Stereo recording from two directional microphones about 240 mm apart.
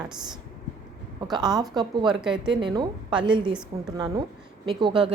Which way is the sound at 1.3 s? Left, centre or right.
Centre.